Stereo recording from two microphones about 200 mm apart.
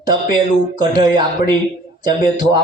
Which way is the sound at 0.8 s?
25° right (ahead or behind).